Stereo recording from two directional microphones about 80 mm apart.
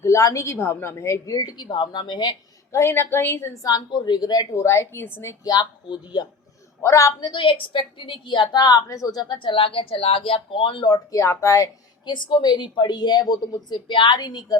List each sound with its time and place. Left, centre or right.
0.0 s a woman's voice: left
1.3 s a woman's voice: left
2.7 s a woman's voice: left
3.5 s speech: left
3.8 s a woman's voice: left
4.5 s a woman's voice: left
5.5 s speech: left
6.8 s speech: left
7.3 s a woman's voice: left
8.6 s speech: left
9.3 s a woman's voice: left
10.9 s speech: left
12.0 s a woman's voice: left